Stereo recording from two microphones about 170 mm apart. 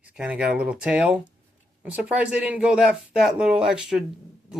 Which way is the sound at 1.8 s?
5° right (ahead or behind).